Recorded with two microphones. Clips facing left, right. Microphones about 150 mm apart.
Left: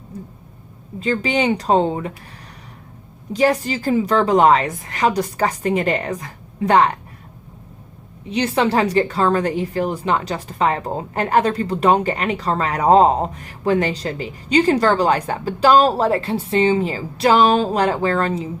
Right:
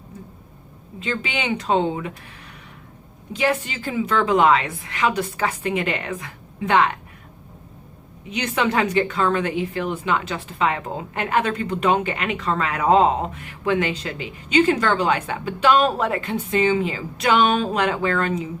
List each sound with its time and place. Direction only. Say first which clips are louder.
0.9 s a woman's voice: left 7 dB; 40° left (ahead or behind)
3.3 s a woman's voice: left 5 dB; 40° left (ahead or behind)
8.3 s a woman's voice: left 4 dB; 35° left (ahead or behind)